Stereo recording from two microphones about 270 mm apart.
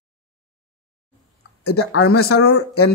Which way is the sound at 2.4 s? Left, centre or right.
Left.